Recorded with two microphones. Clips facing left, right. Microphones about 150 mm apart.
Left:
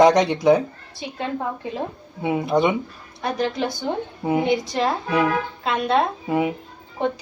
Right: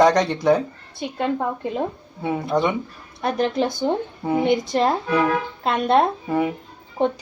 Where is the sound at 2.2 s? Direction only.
15° left (ahead or behind).